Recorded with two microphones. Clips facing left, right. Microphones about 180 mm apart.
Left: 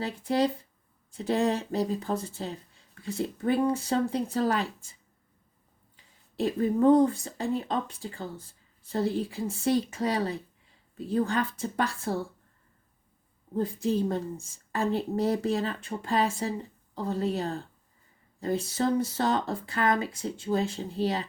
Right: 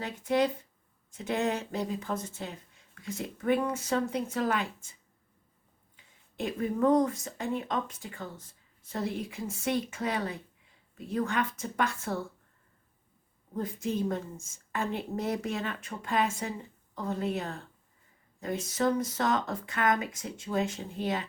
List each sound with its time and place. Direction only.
0.0 s speech: 35° left (ahead or behind)
6.3 s speech: 35° left (ahead or behind)
13.6 s speech: 30° left (ahead or behind)